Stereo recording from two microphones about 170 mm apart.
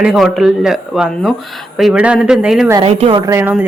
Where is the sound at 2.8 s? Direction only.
35° right (ahead or behind); by 3.6 s 10° right (ahead or behind).